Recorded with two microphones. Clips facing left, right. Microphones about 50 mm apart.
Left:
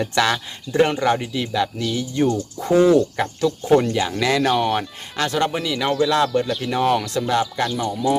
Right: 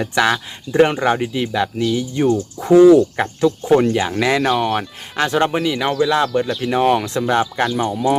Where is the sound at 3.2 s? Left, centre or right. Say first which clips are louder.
Right 4 dB; right.